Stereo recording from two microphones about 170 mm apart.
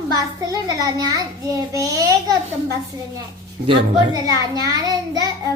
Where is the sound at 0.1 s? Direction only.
20° right (ahead or behind).